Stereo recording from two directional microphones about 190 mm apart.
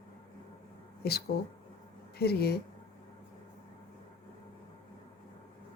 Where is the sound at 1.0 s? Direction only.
55° left (ahead or behind).